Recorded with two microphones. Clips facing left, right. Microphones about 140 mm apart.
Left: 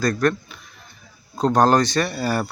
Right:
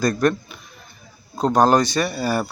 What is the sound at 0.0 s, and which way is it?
Speech, 20° right (ahead or behind).